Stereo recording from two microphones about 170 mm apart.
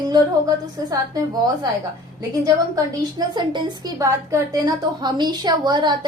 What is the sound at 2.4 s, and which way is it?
A woman's voice, 20° right (ahead or behind).